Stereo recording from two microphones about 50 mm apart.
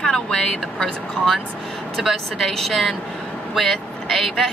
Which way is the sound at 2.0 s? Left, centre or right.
Centre.